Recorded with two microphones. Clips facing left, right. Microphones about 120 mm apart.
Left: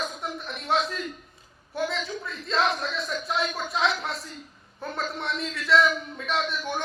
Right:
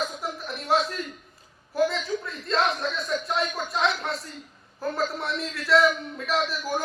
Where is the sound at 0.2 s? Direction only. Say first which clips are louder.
Right 1 dB; centre (ahead or behind).